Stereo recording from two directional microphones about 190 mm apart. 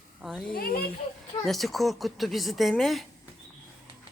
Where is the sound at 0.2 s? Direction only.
Centre (ahead or behind).